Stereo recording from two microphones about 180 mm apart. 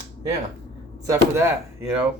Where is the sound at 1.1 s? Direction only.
15° right (ahead or behind).